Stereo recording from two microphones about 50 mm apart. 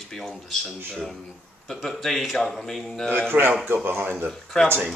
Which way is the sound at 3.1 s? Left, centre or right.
Right.